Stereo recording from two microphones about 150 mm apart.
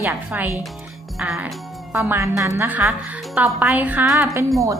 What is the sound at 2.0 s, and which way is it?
A woman's voice, 15° right (ahead or behind).